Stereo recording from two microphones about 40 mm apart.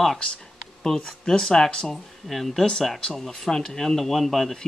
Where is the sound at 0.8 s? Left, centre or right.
Centre.